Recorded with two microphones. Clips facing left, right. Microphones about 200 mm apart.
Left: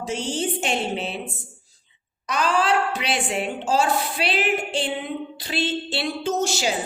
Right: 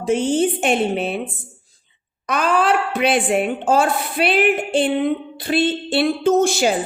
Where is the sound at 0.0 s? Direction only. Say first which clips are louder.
Right 9 dB; 55° right (ahead or behind).